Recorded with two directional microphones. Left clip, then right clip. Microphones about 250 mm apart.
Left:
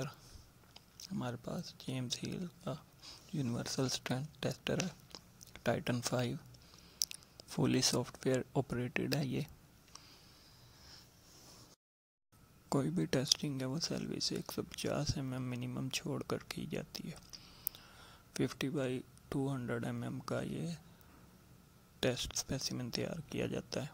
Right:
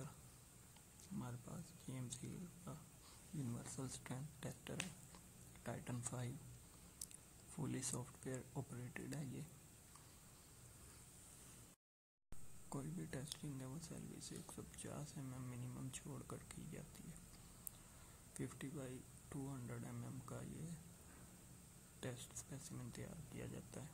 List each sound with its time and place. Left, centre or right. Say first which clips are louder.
1.2 s speech: left 17 dB; left
12.6 s speech: left 16 dB; left
18.3 s speech: left 15 dB; left
22.0 s speech: left 17 dB; left